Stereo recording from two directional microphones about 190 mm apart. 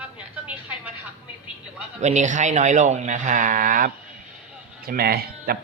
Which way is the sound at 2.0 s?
40° right (ahead or behind).